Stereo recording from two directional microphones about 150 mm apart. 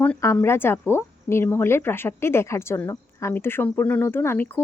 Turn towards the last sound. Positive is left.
turn(degrees=10)  # may be behind; listen again after turning